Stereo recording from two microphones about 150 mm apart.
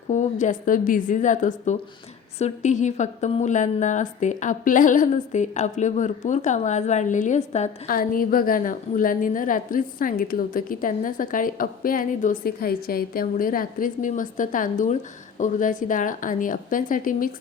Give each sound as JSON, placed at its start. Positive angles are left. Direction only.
{"t": 0.1, "sound": "a woman's voice", "side_deg": 55}
{"t": 7.9, "sound": "a woman's voice", "side_deg": 70}